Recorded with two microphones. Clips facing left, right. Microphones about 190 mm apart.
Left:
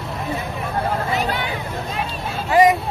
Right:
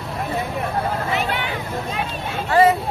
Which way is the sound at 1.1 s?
40° left (ahead or behind).